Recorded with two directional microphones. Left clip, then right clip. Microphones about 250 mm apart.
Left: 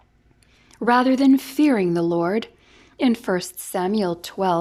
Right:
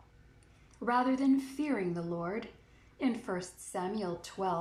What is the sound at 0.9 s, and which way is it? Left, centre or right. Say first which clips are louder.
A woman's voice: left 12 dB; left.